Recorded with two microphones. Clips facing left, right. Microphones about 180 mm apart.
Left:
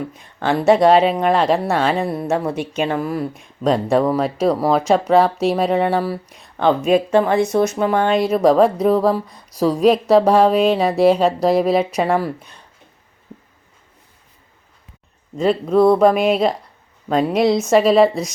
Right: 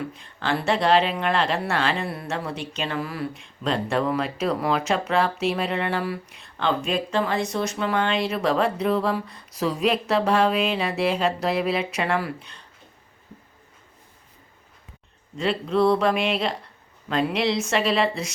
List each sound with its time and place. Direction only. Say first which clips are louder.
0.1 s speech: left 6 dB; 45° left (ahead or behind)
15.4 s speech: left 7 dB; 45° left (ahead or behind)